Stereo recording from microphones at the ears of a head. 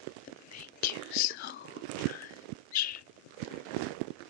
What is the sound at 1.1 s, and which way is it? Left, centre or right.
Whispering, left.